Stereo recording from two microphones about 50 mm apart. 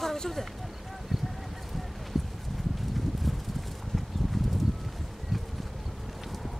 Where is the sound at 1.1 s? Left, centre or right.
Centre.